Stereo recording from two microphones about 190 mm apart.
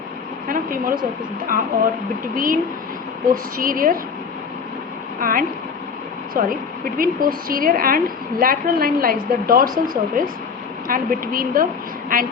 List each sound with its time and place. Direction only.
0.4 s a sound: 45° right (ahead or behind)
1.5 s a woman's voice: 45° right (ahead or behind)
3.6 s a woman's voice: 45° right (ahead or behind)
5.2 s a woman's voice: 45° right (ahead or behind)
10.8 s a woman's voice: 45° right (ahead or behind)